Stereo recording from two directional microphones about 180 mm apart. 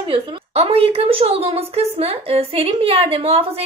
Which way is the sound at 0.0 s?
30° right (ahead or behind).